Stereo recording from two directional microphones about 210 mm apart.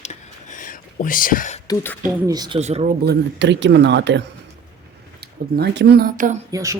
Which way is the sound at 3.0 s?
55° right (ahead or behind).